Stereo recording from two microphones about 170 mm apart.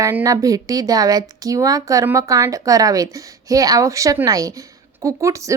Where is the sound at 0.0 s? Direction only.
15° right (ahead or behind).